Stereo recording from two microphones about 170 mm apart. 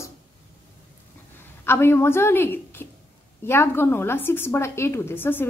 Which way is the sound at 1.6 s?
15° left (ahead or behind).